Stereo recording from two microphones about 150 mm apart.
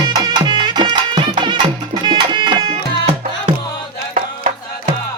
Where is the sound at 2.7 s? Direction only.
40° right (ahead or behind).